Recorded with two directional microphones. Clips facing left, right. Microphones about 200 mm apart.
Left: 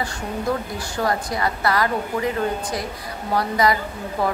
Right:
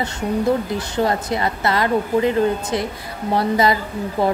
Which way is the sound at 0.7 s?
25° right (ahead or behind).